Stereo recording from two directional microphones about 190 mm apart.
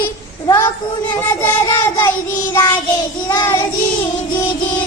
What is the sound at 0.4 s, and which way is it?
Child singing, 20° left (ahead or behind).